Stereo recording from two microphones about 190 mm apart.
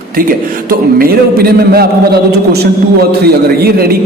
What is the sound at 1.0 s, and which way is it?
A man's voice, 55° right (ahead or behind).